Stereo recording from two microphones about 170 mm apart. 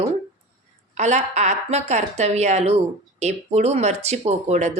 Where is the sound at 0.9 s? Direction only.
45° right (ahead or behind).